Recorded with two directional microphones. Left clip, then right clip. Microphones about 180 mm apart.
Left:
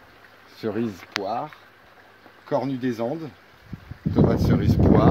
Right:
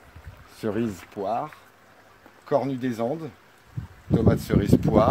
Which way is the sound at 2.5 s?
40° right (ahead or behind).